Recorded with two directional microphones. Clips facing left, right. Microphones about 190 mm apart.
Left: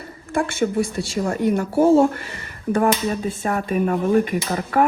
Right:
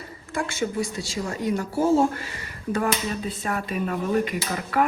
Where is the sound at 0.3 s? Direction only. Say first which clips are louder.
Left 6 dB; 55° left (ahead or behind).